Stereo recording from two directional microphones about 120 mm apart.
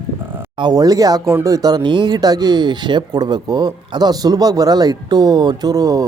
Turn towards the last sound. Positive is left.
turn(degrees=-30)  # may be behind; listen again after turning